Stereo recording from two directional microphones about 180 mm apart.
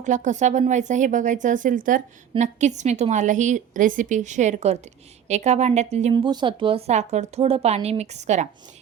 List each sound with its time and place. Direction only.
0.0 s a woman's voice: 45° right (ahead or behind)
6.2 s a woman's voice: 25° right (ahead or behind)